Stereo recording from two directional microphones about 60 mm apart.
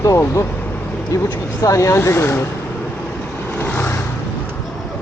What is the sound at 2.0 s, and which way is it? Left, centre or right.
Speech, left.